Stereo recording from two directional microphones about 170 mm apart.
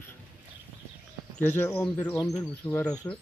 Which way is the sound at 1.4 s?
15° left (ahead or behind).